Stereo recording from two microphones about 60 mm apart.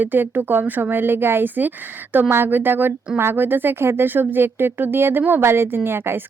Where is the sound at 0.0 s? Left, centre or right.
Right.